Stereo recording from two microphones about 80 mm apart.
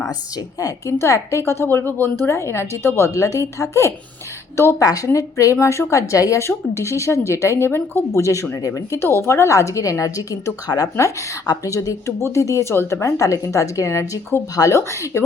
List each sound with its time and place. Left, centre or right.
0.6 s a woman's voice: left